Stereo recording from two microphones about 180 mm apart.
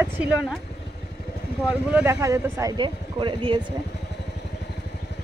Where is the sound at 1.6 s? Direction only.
10° right (ahead or behind); by 3.6 s 25° right (ahead or behind).